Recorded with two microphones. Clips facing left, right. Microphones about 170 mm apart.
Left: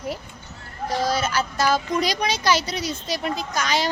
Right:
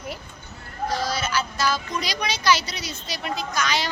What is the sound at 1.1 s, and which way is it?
Speech, 50° left (ahead or behind).